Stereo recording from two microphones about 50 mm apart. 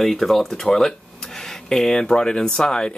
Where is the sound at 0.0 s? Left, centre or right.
Centre.